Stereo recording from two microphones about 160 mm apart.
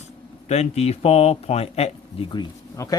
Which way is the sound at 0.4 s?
45° left (ahead or behind).